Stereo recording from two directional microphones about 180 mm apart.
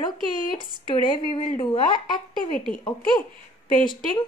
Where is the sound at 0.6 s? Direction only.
25° left (ahead or behind).